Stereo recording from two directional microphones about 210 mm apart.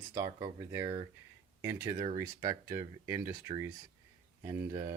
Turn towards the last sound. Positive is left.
turn(degrees=-15)  # may be behind; listen again after turning